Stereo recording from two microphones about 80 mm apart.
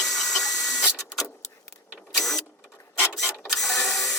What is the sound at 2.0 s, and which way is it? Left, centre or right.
Printer, centre.